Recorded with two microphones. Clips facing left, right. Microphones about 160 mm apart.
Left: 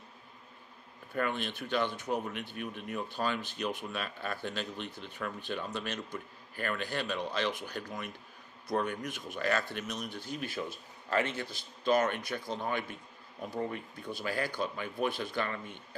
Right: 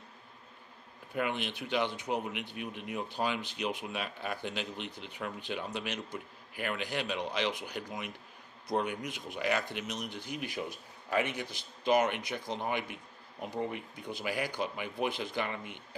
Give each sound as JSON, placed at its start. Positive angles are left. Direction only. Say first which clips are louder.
{"t": 1.1, "sound": "speech", "louder": "even", "side_deg": -15}